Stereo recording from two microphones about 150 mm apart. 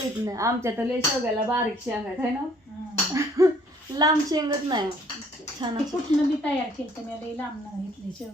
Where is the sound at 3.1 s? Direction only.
20° right (ahead or behind).